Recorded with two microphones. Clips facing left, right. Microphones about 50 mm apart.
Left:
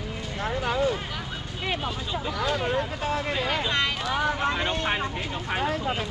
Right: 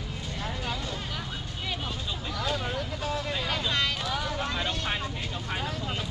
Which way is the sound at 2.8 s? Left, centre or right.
Left.